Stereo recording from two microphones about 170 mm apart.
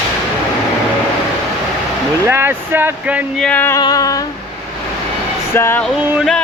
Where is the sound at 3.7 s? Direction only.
20° left (ahead or behind).